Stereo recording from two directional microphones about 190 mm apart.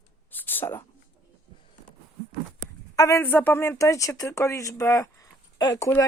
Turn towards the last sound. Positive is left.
turn(degrees=15)  # may be behind; listen again after turning